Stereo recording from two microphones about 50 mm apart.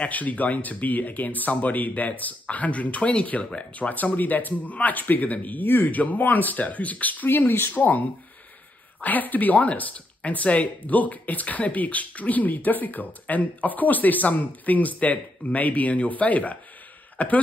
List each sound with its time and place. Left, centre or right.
0.0 s speech: left
7.7 s speech: left
9.0 s speech: left